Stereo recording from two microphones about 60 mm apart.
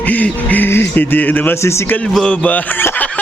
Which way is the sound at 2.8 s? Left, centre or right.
Left.